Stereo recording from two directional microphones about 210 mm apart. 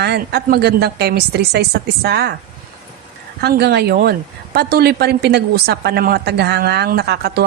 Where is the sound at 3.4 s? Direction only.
50° right (ahead or behind).